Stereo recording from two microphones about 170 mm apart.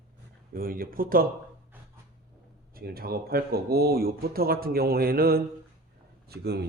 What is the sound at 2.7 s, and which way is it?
Speech, 65° right (ahead or behind).